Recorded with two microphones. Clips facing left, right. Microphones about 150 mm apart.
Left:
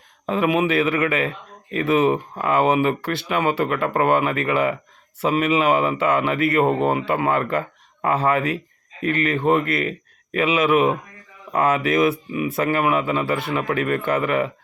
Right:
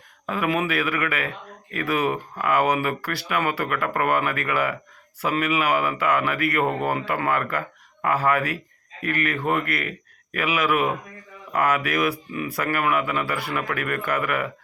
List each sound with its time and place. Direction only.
0.3 s a man's voice: 25° left (ahead or behind)